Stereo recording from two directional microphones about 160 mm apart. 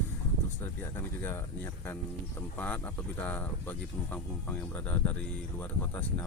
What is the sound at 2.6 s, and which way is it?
Speech, 10° left (ahead or behind).